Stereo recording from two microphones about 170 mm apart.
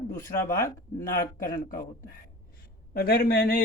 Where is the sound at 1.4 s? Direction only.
60° left (ahead or behind).